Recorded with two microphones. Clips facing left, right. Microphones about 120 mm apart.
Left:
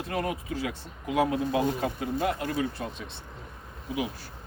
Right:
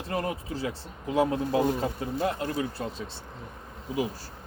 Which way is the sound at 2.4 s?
30° right (ahead or behind).